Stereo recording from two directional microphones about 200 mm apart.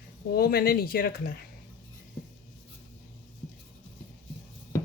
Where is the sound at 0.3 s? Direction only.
50° left (ahead or behind).